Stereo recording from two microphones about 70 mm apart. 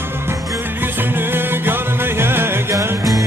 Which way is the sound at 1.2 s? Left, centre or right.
Right.